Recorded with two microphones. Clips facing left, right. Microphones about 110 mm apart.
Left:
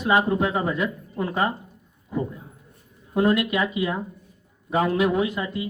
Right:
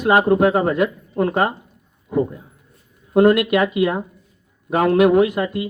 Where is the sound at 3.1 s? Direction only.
60° right (ahead or behind).